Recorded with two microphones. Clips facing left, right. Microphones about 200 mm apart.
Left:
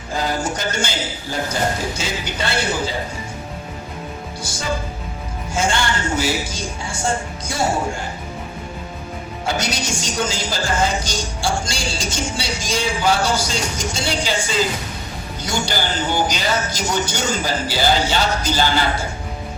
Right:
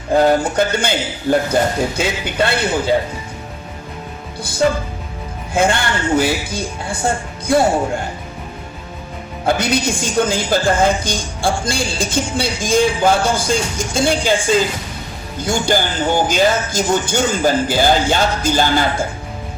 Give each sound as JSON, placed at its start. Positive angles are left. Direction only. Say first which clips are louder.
{"t": 0.1, "sound": "a woman's voice", "louder": "right 9 dB", "side_deg": -60}
{"t": 5.5, "sound": "a woman's voice", "louder": "right 4 dB", "side_deg": -55}
{"t": 9.5, "sound": "a woman's voice", "louder": "right 7 dB", "side_deg": -55}